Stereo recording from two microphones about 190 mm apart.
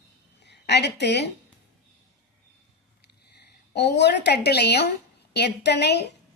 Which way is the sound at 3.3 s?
60° left (ahead or behind).